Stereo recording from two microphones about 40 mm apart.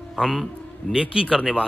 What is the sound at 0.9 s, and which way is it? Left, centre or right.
Speech, right.